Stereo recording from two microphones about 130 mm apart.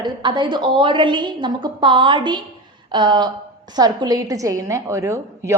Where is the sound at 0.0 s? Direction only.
40° right (ahead or behind).